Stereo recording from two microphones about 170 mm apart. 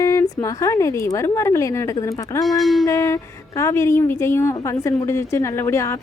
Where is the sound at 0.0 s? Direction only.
20° left (ahead or behind).